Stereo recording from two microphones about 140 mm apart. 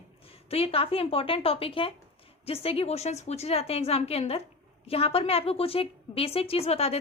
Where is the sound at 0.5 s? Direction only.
45° left (ahead or behind).